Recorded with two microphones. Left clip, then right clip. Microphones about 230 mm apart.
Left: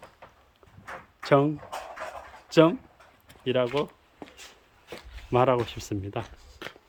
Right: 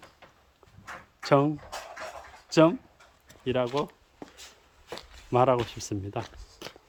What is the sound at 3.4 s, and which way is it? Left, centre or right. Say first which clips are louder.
Speech: left 2 dB; centre.